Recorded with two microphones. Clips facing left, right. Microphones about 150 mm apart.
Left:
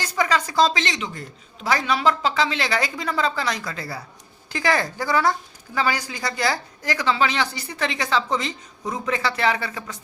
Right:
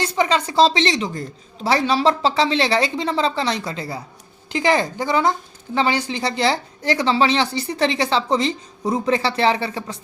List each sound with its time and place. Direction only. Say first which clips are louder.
0.0 s a woman's voice: right 3 dB; 25° right (ahead or behind)